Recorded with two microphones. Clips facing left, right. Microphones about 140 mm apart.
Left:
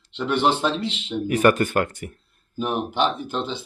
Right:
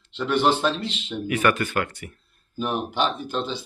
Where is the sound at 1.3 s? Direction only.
40° left (ahead or behind).